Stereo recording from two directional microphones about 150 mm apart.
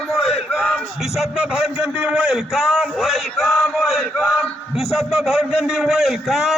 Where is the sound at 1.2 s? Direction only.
Centre (ahead or behind).